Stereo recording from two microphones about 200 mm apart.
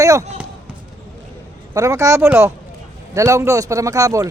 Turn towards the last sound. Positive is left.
turn(degrees=-15)  # may be behind; listen again after turning